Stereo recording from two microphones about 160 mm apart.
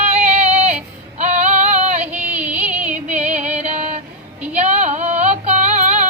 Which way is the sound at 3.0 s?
45° right (ahead or behind).